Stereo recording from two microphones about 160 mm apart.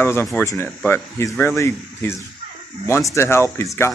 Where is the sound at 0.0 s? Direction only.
15° left (ahead or behind).